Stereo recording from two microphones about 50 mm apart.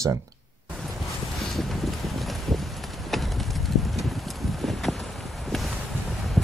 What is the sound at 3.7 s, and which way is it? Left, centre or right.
Clip-clop, centre.